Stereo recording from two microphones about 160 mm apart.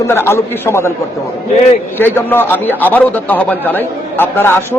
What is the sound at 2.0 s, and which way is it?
A man's voice, 15° left (ahead or behind).